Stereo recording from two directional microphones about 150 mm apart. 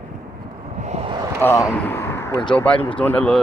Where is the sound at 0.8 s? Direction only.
45° right (ahead or behind).